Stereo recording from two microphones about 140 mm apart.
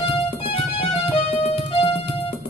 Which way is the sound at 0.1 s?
45° left (ahead or behind).